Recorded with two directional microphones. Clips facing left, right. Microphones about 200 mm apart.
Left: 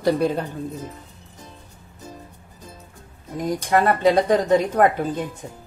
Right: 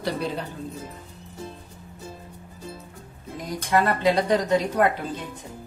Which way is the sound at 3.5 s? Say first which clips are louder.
Left 3 dB; 50° left (ahead or behind).